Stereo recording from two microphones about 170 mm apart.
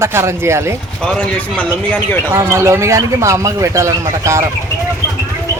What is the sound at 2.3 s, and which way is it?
Speech, 15° right (ahead or behind).